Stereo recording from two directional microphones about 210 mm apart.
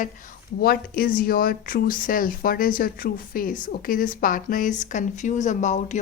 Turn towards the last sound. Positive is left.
turn(degrees=35)  # may be behind; listen again after turning